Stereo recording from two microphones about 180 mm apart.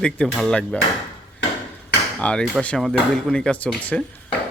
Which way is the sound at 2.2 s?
5° left (ahead or behind).